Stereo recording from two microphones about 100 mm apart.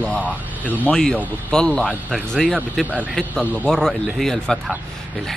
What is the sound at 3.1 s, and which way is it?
A man's voice, centre (ahead or behind).